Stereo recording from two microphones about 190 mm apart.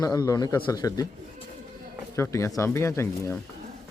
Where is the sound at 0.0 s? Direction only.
20° left (ahead or behind).